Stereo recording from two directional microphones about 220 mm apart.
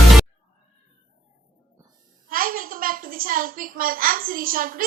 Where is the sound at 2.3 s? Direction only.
40° right (ahead or behind).